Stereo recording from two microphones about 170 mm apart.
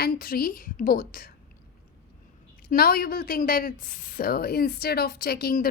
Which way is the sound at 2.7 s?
60° left (ahead or behind).